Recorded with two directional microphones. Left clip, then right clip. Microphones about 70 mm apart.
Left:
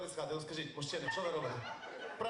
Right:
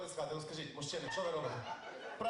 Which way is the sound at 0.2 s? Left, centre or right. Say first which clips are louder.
Left 1 dB; left.